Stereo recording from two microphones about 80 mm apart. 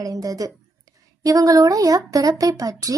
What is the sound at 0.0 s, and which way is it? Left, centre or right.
Speech, right.